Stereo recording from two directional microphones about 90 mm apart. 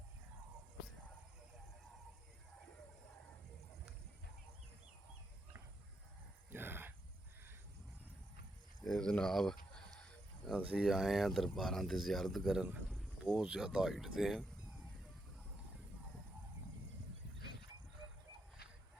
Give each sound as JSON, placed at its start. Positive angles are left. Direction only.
{"t": 6.5, "sound": "dog", "side_deg": -20}
{"t": 8.9, "sound": "a sound", "side_deg": 10}
{"t": 10.8, "sound": "speech", "side_deg": 0}